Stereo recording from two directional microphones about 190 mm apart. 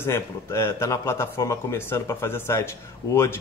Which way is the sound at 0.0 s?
15° left (ahead or behind).